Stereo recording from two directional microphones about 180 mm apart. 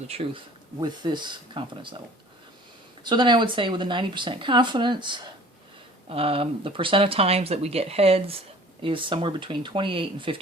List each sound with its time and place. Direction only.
0.1 s speech: 30° right (ahead or behind)
3.0 s speech: 25° right (ahead or behind)